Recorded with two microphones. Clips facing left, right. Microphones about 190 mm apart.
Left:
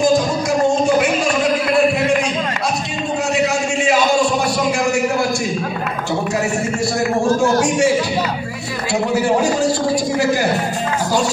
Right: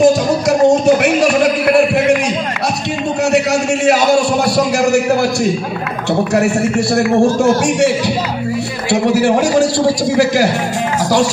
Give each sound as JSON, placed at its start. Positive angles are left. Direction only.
{"t": 0.0, "sound": "music", "side_deg": -70}
{"t": 3.8, "sound": "a sound", "side_deg": -70}
{"t": 9.1, "sound": "a man's voice", "side_deg": -85}